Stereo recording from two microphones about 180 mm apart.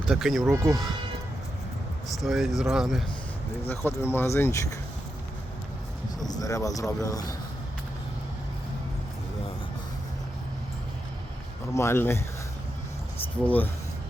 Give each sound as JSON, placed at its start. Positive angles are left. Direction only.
{"t": 0.1, "sound": "speech", "side_deg": 0}
{"t": 2.2, "sound": "speech", "side_deg": 0}
{"t": 3.7, "sound": "speech", "side_deg": 10}
{"t": 6.1, "sound": "speech", "side_deg": 20}
{"t": 11.7, "sound": "speech", "side_deg": 15}
{"t": 13.4, "sound": "speech", "side_deg": 10}